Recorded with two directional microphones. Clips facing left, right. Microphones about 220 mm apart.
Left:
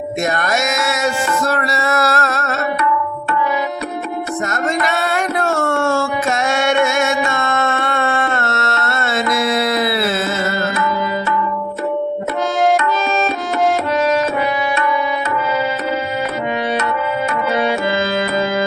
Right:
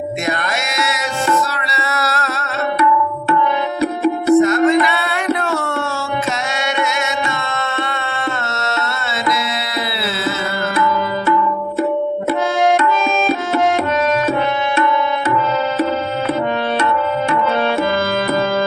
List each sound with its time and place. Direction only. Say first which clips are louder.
0.3 s music: left 3 dB; 45° left (ahead or behind)
1.5 s a sound: left 6 dB; 50° left (ahead or behind)
4.4 s music: right 6 dB; 45° left (ahead or behind)